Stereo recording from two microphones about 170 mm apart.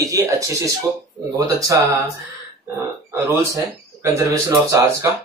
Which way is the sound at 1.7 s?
20° right (ahead or behind).